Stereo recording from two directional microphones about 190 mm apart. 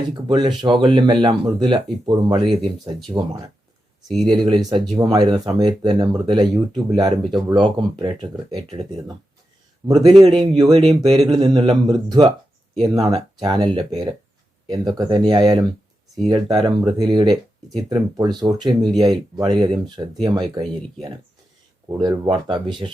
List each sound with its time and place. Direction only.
0.3 s speech: 25° right (ahead or behind)
4.3 s speech: 25° right (ahead or behind)
22.1 s speech: 20° right (ahead or behind)